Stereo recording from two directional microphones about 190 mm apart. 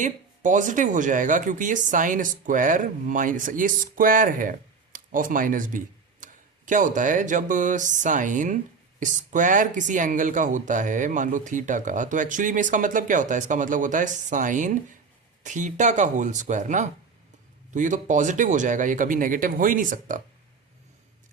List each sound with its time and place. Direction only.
0.0 s speech: 40° right (ahead or behind)